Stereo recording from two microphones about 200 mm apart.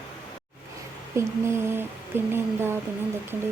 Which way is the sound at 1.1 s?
15° right (ahead or behind).